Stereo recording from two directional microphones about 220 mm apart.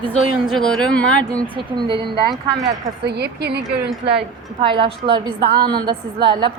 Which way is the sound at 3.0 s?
50° right (ahead or behind).